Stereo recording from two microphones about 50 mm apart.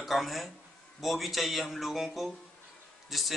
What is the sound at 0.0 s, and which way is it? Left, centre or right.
Speech, centre.